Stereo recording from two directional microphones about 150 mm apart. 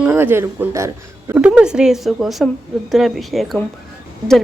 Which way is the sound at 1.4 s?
5° right (ahead or behind).